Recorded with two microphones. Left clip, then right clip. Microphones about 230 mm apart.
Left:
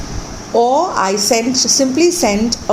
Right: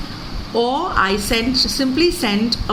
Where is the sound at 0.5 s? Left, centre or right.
Centre.